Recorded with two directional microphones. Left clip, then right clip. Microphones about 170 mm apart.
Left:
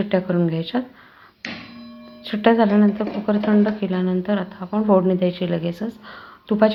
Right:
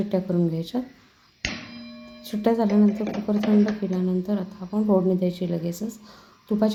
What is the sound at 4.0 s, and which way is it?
Speech, centre (ahead or behind).